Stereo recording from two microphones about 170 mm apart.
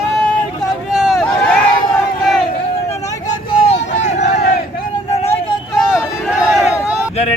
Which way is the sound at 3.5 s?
90° left.